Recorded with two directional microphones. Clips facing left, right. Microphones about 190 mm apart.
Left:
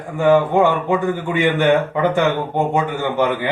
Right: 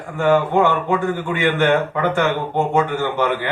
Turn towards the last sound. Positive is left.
turn(degrees=15)  # may be behind; listen again after turning